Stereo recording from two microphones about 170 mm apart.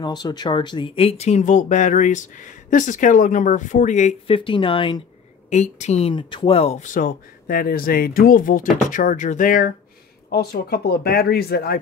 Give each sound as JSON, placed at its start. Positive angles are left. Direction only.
{"t": 0.0, "sound": "speech", "side_deg": 25}
{"t": 4.4, "sound": "speech", "side_deg": 30}
{"t": 5.5, "sound": "speech", "side_deg": 45}
{"t": 10.3, "sound": "speech", "side_deg": 65}